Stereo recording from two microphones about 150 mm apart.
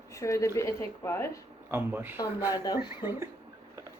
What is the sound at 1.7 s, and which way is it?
Speech, 15° right (ahead or behind).